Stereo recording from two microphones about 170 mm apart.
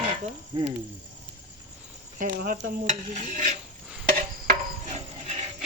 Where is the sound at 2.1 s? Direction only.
55° right (ahead or behind).